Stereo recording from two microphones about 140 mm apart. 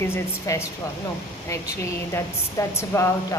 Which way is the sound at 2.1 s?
20° left (ahead or behind).